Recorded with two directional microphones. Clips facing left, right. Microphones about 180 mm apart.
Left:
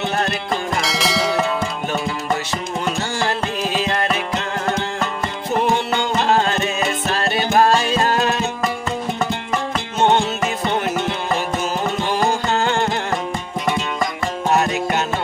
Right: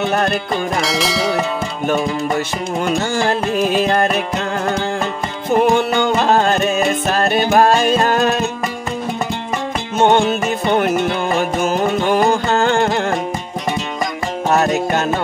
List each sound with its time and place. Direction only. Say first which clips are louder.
0.1 s music: right 5 dB; 50° right (ahead or behind)
0.7 s church bell: right 2 dB; centre (ahead or behind)
3.0 s music: right 4 dB; 50° right (ahead or behind)
5.6 s music: right 5 dB; 50° right (ahead or behind)
9.9 s music: right 4 dB; 55° right (ahead or behind)
12.3 s music: right 4 dB; 50° right (ahead or behind)